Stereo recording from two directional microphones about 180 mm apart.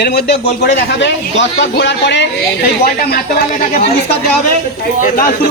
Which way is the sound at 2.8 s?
55° left (ahead or behind).